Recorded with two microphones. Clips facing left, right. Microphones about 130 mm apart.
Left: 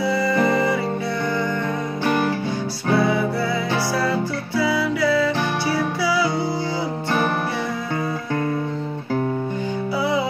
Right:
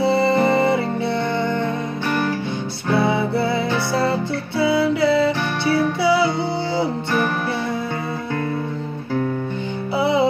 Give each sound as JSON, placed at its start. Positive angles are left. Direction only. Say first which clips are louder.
{"t": 0.0, "sound": "music", "louder": "right 3 dB", "side_deg": -25}
{"t": 2.0, "sound": "music", "louder": "left 2 dB", "side_deg": 15}
{"t": 3.0, "sound": "music", "louder": "right 3 dB", "side_deg": -25}
{"t": 9.9, "sound": "music", "louder": "right 4 dB", "side_deg": -25}